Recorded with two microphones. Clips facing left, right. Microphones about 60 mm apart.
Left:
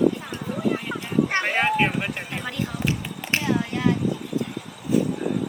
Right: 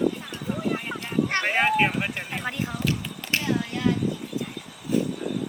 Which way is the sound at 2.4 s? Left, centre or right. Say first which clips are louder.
Even; right.